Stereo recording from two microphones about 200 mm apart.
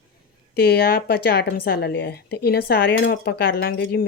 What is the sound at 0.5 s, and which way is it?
Speech, 50° left (ahead or behind).